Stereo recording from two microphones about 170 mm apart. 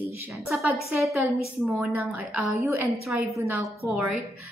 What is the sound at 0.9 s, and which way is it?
A woman's voice, centre (ahead or behind).